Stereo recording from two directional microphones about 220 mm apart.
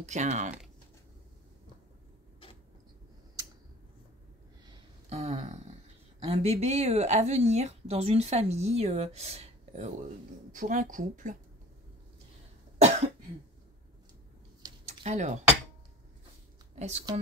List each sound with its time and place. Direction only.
0.0 s speech: 30° right (ahead or behind)
5.1 s a sound: 30° right (ahead or behind)
6.2 s a woman's voice: 30° right (ahead or behind)
12.7 s cough: 30° right (ahead or behind)
14.9 s speech: 30° right (ahead or behind)
16.7 s a woman's voice: 30° right (ahead or behind)